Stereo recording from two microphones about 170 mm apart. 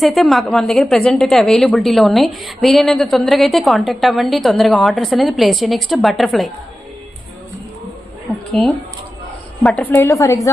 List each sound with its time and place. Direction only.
0.0 s a woman's voice: centre (ahead or behind)
9.6 s a woman's voice: 10° left (ahead or behind)